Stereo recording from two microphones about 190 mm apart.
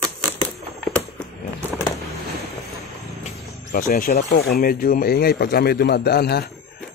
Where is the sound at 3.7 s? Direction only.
50° left (ahead or behind).